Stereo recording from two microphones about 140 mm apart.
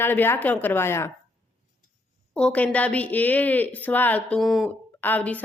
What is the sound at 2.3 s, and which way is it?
A woman's voice, 10° left (ahead or behind).